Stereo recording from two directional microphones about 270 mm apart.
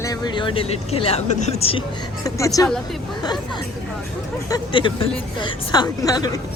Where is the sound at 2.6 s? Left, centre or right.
Centre.